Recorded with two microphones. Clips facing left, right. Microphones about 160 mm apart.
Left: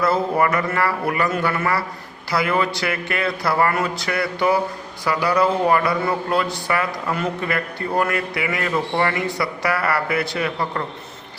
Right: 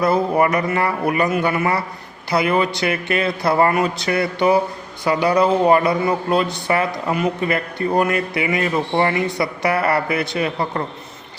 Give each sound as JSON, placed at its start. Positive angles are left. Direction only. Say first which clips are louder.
{"t": 0.0, "sound": "speech", "louder": "right 2 dB", "side_deg": -20}